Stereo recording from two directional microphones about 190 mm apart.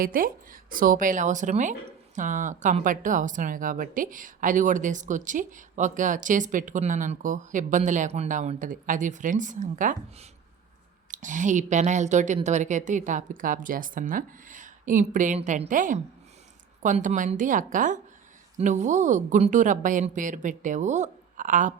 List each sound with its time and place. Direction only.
0.0 s speech: 45° right (ahead or behind)